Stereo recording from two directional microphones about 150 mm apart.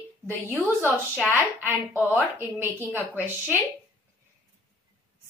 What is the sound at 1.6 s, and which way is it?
A woman's voice, 15° right (ahead or behind).